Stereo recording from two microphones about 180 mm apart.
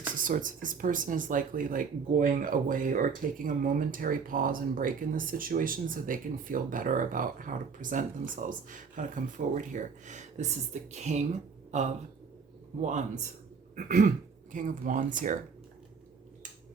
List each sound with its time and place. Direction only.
0.2 s speech: 50° right (ahead or behind)
12.8 s speech: 40° right (ahead or behind)